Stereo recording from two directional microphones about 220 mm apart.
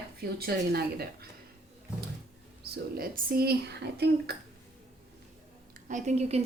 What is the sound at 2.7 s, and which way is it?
Speech, 40° right (ahead or behind).